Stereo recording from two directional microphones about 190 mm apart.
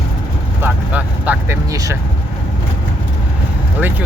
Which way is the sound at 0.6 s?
10° right (ahead or behind).